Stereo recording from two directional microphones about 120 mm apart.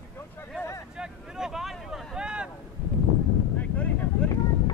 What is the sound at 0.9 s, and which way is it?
Vehicle, 5° right (ahead or behind).